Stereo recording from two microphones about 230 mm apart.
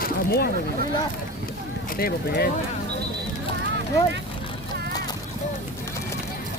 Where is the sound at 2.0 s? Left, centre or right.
Left.